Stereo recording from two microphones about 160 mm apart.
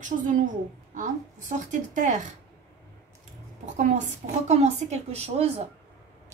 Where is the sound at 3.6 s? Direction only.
50° right (ahead or behind).